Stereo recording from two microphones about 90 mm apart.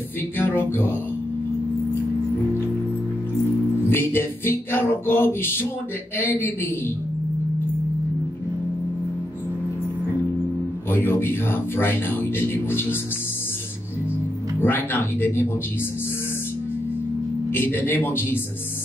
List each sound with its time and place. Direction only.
0.4 s speech: 25° left (ahead or behind)
3.8 s music: 25° left (ahead or behind)
6.1 s speech: 25° left (ahead or behind)
10.9 s speech: 25° left (ahead or behind)
14.6 s speech: 25° left (ahead or behind)
17.5 s speech: 25° left (ahead or behind)